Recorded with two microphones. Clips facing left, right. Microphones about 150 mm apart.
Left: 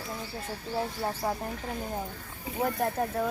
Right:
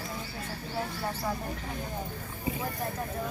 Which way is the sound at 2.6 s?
70° left (ahead or behind).